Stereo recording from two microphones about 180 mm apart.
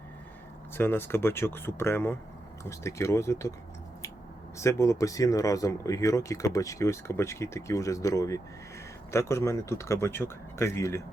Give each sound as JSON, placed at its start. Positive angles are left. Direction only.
{"t": 0.7, "sound": "speech", "side_deg": 10}
{"t": 4.5, "sound": "speech", "side_deg": 15}